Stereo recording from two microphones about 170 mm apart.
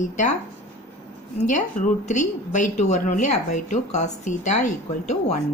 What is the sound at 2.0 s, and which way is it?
A woman's voice, 45° left (ahead or behind).